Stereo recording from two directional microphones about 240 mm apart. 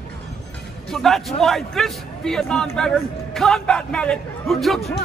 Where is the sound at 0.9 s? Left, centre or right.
Centre.